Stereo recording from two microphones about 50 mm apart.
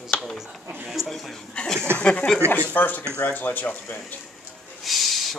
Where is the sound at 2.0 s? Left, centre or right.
Left.